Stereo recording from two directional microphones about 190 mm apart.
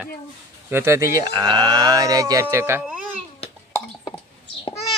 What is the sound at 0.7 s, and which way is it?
Speech, 15° right (ahead or behind).